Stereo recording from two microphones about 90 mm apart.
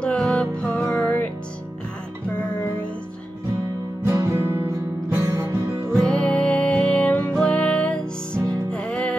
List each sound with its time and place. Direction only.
0.0 s music: 10° left (ahead or behind)
4.0 s music: 30° right (ahead or behind)
5.9 s music: 10° left (ahead or behind)